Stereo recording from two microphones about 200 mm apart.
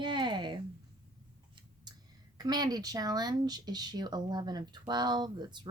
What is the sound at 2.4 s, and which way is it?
Speech, 20° right (ahead or behind).